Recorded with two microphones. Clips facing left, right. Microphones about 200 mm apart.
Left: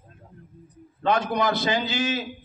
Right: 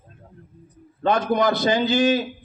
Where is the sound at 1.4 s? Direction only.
50° right (ahead or behind).